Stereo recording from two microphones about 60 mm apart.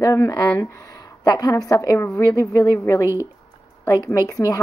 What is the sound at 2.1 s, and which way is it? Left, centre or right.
Speech, left.